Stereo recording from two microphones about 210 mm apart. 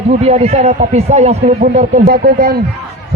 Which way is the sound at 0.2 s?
30° right (ahead or behind).